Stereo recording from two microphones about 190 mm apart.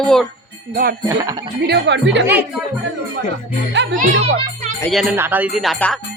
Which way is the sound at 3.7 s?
70° right (ahead or behind).